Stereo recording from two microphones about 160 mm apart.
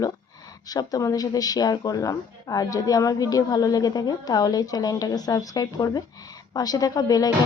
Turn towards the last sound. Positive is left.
turn(degrees=25)  # may be behind; listen again after turning